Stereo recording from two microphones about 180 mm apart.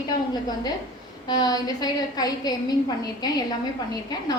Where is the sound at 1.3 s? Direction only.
20° left (ahead or behind).